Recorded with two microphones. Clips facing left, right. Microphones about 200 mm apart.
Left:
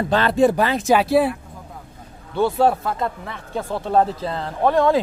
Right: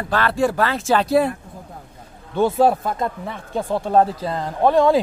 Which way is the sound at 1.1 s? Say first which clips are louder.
Even; centre (ahead or behind).